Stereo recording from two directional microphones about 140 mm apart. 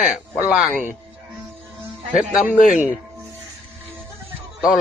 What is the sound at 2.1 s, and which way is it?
Speech, 5° right (ahead or behind).